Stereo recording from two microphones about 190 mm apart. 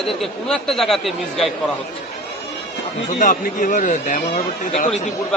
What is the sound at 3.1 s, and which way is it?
A man's voice, 45° left (ahead or behind).